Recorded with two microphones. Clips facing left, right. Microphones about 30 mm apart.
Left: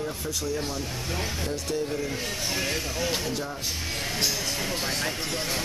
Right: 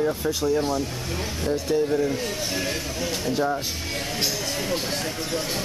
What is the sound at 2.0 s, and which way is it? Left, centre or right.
Speech, centre.